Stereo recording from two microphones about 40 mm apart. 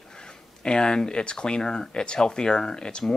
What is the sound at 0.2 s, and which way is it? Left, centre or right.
Speech, left.